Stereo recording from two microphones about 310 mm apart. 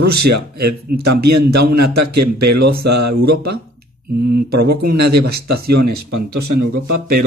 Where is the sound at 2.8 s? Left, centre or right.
Right.